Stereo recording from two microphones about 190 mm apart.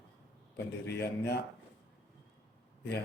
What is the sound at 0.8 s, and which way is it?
Speech, 60° left (ahead or behind).